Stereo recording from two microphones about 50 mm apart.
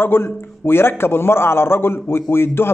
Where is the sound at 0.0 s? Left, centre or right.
Left.